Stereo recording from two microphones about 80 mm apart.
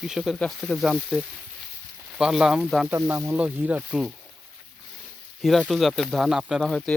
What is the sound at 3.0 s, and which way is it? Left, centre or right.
Speech, right.